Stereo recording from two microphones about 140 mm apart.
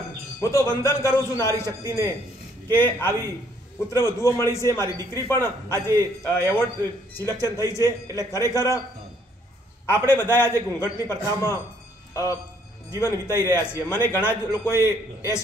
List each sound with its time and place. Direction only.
0.4 s a man's voice: 20° left (ahead or behind)
2.7 s a man's voice: 15° left (ahead or behind)
9.8 s a man's voice: 15° left (ahead or behind)